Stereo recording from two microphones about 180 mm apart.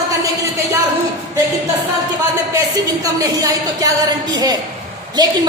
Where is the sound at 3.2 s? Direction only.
20° right (ahead or behind).